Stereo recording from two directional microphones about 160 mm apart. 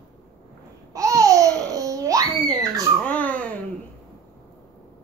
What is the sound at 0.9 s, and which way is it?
Babbling, 20° right (ahead or behind).